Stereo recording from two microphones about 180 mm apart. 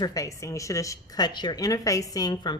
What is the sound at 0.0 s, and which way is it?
A woman's voice, 20° left (ahead or behind).